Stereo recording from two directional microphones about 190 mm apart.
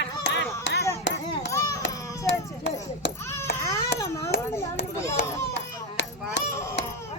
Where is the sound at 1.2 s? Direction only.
20° left (ahead or behind).